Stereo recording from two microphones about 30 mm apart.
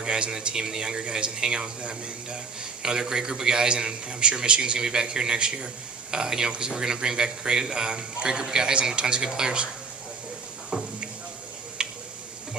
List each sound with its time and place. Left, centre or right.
0.0 s a man's voice: right
2.8 s a man's voice: right
11.8 s a sound: right